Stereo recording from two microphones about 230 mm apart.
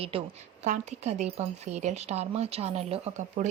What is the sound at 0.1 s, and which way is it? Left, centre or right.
A woman's voice, right.